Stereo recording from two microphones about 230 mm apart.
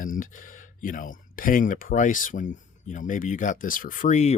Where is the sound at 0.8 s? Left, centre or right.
Left.